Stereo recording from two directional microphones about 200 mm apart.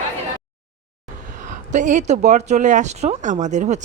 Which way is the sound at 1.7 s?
40° right (ahead or behind).